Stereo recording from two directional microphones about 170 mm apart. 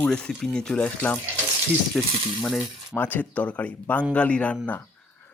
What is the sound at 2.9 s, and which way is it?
Speech, 10° left (ahead or behind).